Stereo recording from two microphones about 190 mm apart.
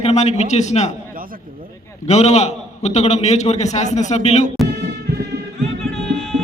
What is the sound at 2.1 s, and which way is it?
A man's voice, 35° left (ahead or behind).